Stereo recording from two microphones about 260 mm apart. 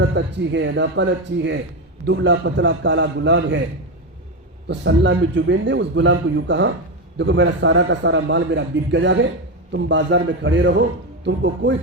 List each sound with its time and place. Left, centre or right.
0.0 s a man's voice: right
4.7 s a man's voice: right